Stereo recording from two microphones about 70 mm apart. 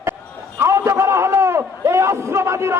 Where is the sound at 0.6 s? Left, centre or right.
Right.